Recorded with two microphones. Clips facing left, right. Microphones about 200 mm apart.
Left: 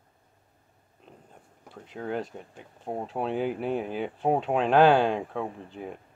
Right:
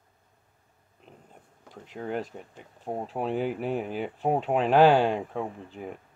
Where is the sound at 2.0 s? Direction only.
5° right (ahead or behind).